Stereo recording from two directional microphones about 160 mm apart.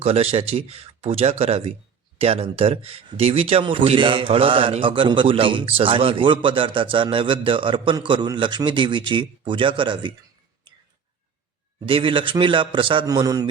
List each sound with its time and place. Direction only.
0.0 s speech: 40° right (ahead or behind)
10.7 s whispering: 30° right (ahead or behind)
11.9 s speech: 30° right (ahead or behind)